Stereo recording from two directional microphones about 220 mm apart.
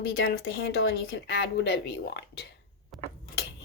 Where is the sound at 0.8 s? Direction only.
50° left (ahead or behind).